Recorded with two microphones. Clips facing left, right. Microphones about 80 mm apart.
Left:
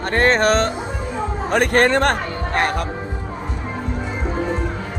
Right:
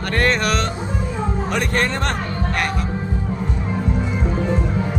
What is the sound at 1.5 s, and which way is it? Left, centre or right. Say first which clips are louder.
Speech: left 8 dB; left.